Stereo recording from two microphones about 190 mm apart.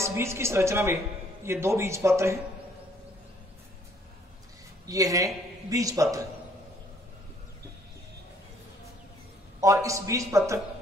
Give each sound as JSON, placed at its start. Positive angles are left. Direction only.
{"t": 0.0, "sound": "a man's voice", "side_deg": -15}
{"t": 4.8, "sound": "a man's voice", "side_deg": -20}
{"t": 9.6, "sound": "a man's voice", "side_deg": -15}